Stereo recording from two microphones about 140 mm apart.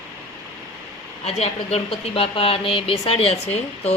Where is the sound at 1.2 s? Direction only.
50° left (ahead or behind).